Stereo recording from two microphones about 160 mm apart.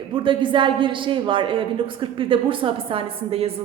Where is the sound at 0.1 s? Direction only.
30° right (ahead or behind).